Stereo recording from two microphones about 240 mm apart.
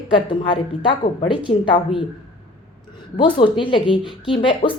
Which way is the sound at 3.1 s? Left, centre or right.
Centre.